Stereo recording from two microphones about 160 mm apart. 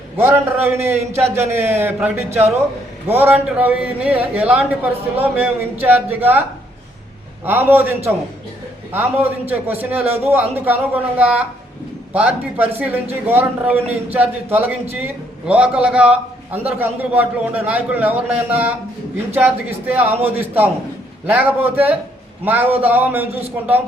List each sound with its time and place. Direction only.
0.7 s a man's voice: 15° right (ahead or behind)
7.4 s a man's voice: 10° right (ahead or behind)